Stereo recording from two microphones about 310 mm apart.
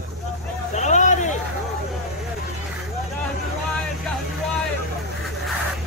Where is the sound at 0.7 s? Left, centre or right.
Left.